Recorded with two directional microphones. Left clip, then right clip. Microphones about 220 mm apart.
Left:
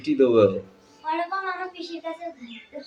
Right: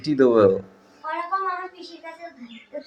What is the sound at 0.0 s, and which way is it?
Speech, 30° right (ahead or behind).